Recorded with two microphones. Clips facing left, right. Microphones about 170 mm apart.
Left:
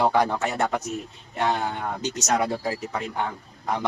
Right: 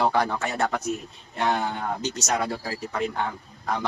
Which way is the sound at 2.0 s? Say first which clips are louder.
Left 5 dB; 20° left (ahead or behind).